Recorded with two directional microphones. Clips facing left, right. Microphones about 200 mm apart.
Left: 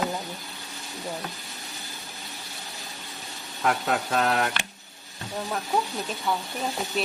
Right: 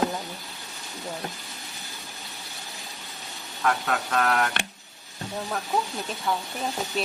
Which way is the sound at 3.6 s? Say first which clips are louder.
Left 1 dB; 25° left (ahead or behind).